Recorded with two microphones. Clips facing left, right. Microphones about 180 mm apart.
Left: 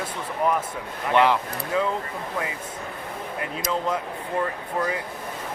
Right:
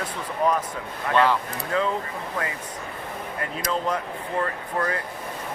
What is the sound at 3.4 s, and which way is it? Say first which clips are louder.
Speech: even; 20° left (ahead or behind).